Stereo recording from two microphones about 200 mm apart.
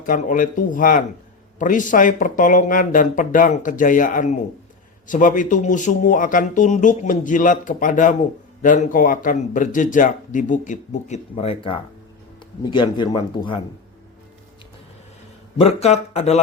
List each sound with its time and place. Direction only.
0.0 s a man's voice: 40° left (ahead or behind); by 13.6 s 25° left (ahead or behind)
15.5 s a man's voice: 30° left (ahead or behind)